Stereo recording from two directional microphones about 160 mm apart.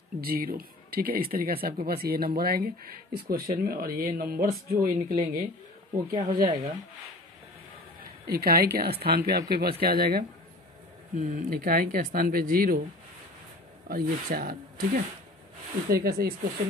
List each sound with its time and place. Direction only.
0.2 s speech: 70° right (ahead or behind)
6.2 s speech: 25° right (ahead or behind)
8.3 s a woman's voice: 80° right
11.1 s speech: 55° right (ahead or behind)
13.8 s speech: 65° right (ahead or behind)